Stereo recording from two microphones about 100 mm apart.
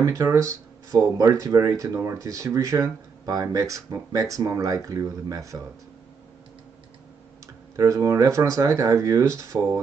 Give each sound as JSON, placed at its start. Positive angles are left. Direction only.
{"t": 0.0, "sound": "speech", "side_deg": -30}
{"t": 7.7, "sound": "speech", "side_deg": -30}